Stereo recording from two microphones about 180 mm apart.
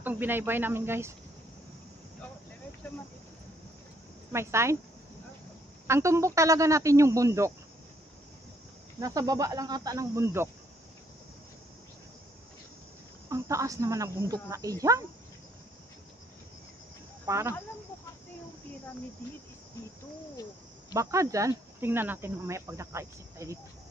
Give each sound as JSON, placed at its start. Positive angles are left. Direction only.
{"t": 0.0, "sound": "speech", "side_deg": -10}
{"t": 4.3, "sound": "speech", "side_deg": -15}
{"t": 5.9, "sound": "speech", "side_deg": -15}
{"t": 9.0, "sound": "speech", "side_deg": -20}
{"t": 13.3, "sound": "speech", "side_deg": -15}
{"t": 17.3, "sound": "speech", "side_deg": -15}
{"t": 20.9, "sound": "speech", "side_deg": -15}